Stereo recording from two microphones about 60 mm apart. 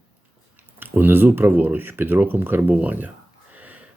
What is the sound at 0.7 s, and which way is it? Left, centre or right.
Speech, right.